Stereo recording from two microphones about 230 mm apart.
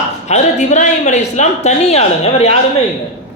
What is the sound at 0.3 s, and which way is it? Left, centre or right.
A man's voice, left.